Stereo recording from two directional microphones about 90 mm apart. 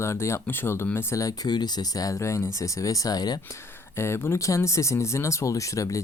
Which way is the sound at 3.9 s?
30° left (ahead or behind).